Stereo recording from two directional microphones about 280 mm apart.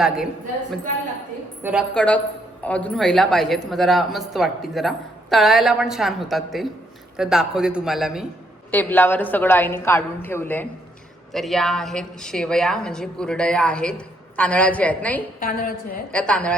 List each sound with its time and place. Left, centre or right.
1.6 s a woman's voice: centre
15.4 s a woman's voice: left
16.1 s a woman's voice: centre